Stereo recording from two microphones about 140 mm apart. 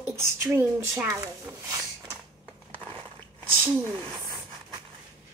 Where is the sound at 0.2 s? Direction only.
15° right (ahead or behind).